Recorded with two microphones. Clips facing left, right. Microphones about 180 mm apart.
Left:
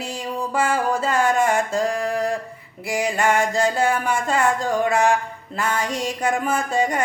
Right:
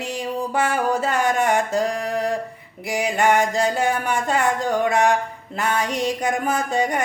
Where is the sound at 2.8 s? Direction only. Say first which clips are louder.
Right 1 dB; 15° right (ahead or behind).